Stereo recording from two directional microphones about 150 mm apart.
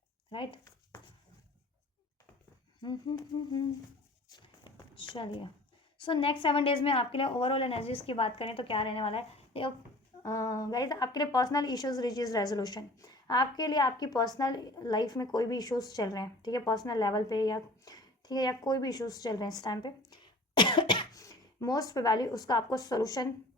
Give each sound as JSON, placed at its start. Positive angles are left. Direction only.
{"t": 0.3, "sound": "a woman's voice", "side_deg": 35}
{"t": 2.8, "sound": "a woman's voice", "side_deg": 30}
{"t": 4.3, "sound": "a sound", "side_deg": 30}
{"t": 6.0, "sound": "a woman's voice", "side_deg": 35}
{"t": 10.2, "sound": "a woman's voice", "side_deg": 20}